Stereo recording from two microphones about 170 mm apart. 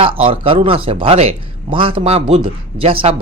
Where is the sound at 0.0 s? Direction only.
30° right (ahead or behind).